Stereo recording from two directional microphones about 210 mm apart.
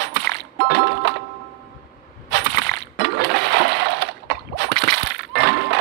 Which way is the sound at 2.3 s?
55° right (ahead or behind).